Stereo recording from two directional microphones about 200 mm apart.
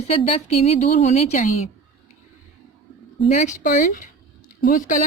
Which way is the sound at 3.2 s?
35° left (ahead or behind).